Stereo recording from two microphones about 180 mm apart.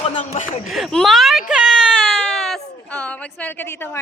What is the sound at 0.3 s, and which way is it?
Speech, 45° left (ahead or behind).